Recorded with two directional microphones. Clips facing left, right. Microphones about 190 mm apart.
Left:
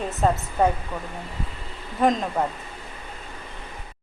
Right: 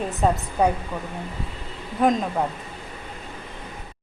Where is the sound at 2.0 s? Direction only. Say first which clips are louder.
Right 1 dB; centre (ahead or behind).